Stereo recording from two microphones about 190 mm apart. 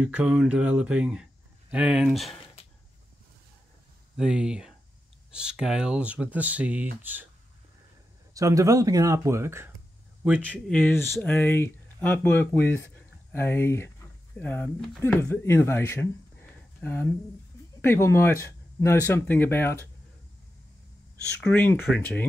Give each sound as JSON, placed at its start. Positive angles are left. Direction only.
{"t": 0.0, "sound": "speech", "side_deg": -5}
{"t": 4.2, "sound": "speech", "side_deg": -5}
{"t": 8.4, "sound": "speech", "side_deg": -15}
{"t": 10.7, "sound": "speech", "side_deg": 10}
{"t": 21.4, "sound": "speech", "side_deg": 10}